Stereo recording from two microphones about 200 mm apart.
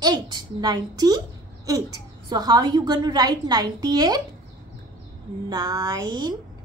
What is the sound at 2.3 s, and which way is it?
A woman's voice, 20° right (ahead or behind).